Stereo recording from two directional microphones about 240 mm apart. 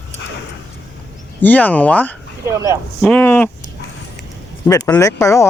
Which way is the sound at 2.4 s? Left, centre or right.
Centre.